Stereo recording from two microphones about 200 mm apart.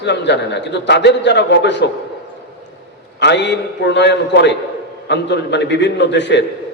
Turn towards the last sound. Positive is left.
turn(degrees=60)  # may be behind; listen again after turning